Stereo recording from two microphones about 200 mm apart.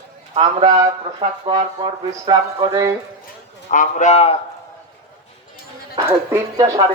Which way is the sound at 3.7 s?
40° left (ahead or behind).